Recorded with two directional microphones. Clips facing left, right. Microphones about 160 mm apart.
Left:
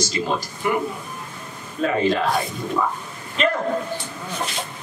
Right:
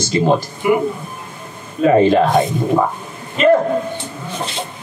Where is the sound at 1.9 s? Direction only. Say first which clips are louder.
Right 10 dB; 40° right (ahead or behind).